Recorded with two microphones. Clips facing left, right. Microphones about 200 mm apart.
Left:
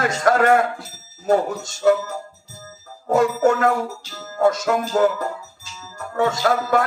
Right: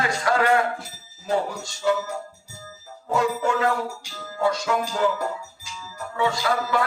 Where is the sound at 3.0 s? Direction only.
45° left (ahead or behind).